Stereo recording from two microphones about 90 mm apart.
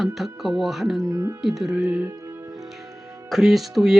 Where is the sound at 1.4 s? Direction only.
5° right (ahead or behind).